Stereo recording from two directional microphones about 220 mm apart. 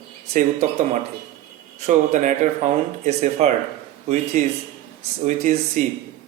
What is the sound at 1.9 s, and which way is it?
A man's voice, 35° right (ahead or behind).